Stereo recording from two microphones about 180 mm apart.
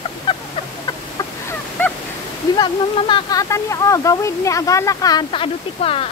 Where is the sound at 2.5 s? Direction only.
25° left (ahead or behind).